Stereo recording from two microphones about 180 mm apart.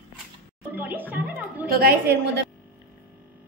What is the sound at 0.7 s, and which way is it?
Music, 10° right (ahead or behind).